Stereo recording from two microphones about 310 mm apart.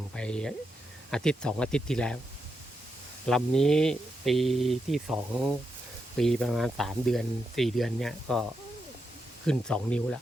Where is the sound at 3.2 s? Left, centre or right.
Centre.